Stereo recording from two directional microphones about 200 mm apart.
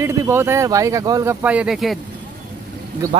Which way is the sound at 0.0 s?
10° right (ahead or behind).